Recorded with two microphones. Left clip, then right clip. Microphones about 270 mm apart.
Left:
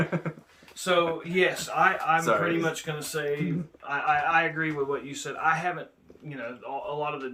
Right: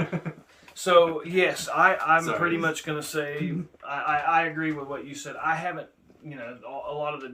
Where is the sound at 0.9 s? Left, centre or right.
Right.